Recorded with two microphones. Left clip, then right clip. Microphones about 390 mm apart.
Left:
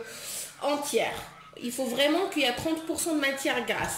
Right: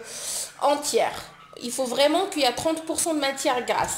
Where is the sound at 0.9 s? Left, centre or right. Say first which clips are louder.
Right 2 dB; right.